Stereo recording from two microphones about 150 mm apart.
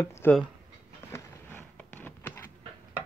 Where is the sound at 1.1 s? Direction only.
10° left (ahead or behind).